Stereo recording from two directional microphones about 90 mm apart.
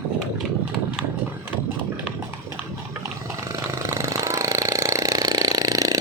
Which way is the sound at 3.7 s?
30° right (ahead or behind).